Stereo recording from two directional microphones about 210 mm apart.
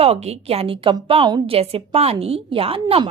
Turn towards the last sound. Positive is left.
turn(degrees=-25)  # may be behind; listen again after turning